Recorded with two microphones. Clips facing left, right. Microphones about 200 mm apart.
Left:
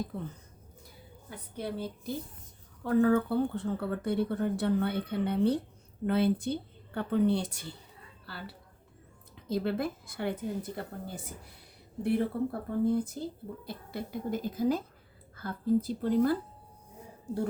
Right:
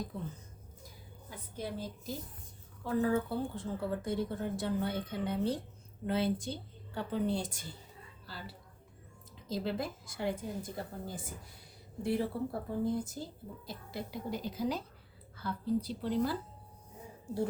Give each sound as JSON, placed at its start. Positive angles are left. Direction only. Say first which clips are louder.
{"t": 1.5, "sound": "a woman's voice", "louder": "left 4 dB", "side_deg": 60}